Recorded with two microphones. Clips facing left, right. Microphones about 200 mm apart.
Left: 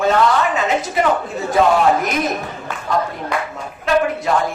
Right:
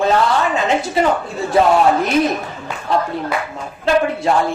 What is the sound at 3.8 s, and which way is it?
Speech, 30° right (ahead or behind).